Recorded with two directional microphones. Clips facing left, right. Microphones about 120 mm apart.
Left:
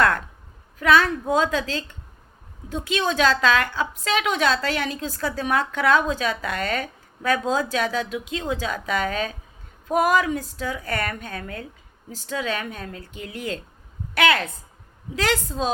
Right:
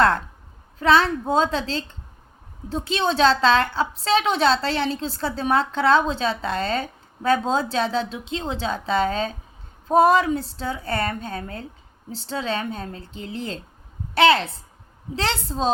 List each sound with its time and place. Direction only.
0.8 s a woman's voice: 30° right (ahead or behind)